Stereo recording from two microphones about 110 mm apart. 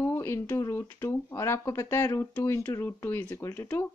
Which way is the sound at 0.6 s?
30° left (ahead or behind).